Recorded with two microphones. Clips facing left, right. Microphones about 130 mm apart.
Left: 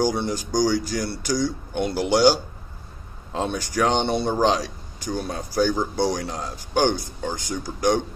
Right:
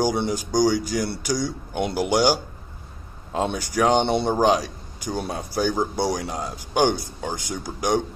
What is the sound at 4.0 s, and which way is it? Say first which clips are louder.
Speech: right 1 dB; 25° right (ahead or behind).